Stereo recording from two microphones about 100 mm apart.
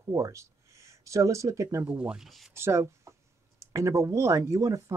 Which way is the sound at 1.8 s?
10° right (ahead or behind).